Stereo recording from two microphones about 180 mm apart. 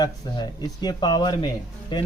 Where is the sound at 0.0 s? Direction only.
20° left (ahead or behind).